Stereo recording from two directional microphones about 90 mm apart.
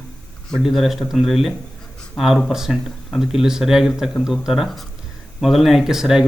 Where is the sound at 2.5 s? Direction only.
5° right (ahead or behind).